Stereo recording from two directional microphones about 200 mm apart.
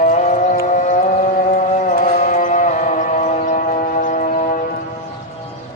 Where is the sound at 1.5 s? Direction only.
40° left (ahead or behind).